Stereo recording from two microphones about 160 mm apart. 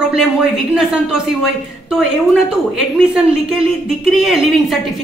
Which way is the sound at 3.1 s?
5° right (ahead or behind).